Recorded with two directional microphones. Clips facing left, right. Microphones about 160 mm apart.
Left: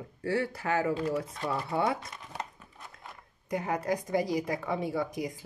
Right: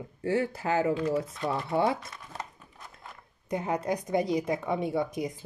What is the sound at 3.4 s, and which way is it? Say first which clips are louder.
A woman's voice: right 1 dB; 25° right (ahead or behind).